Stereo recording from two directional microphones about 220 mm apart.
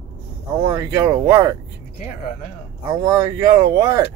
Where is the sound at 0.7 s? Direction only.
15° right (ahead or behind).